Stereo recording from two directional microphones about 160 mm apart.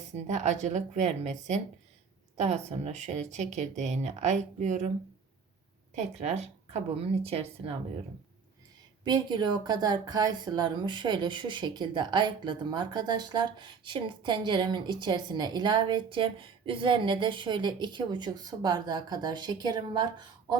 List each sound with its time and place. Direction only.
0.1 s speech: 45° right (ahead or behind)
5.9 s speech: 45° right (ahead or behind)
9.0 s speech: 25° right (ahead or behind)